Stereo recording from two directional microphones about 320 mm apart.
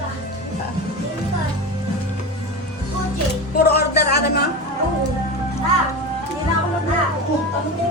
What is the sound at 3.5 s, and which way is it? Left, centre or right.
Speech, left.